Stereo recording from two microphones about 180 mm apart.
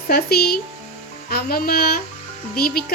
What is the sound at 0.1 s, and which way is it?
Speech, 60° left (ahead or behind).